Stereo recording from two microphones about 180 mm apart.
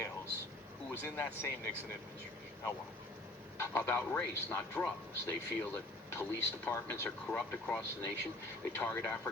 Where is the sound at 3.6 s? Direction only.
15° left (ahead or behind).